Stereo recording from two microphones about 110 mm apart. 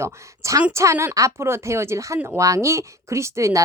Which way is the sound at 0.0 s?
30° right (ahead or behind).